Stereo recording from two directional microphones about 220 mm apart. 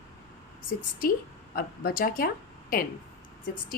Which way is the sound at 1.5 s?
40° left (ahead or behind).